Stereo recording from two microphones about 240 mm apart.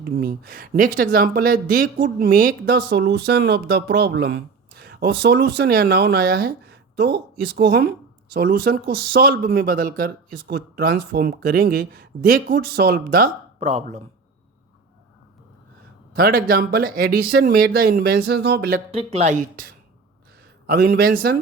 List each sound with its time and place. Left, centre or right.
0.1 s speech: right
16.1 s speech: right
18.9 s speech: right
20.7 s speech: right